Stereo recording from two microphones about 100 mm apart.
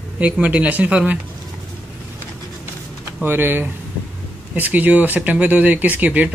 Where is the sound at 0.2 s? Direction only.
15° right (ahead or behind).